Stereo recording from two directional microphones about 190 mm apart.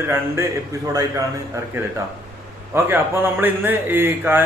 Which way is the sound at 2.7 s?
10° right (ahead or behind).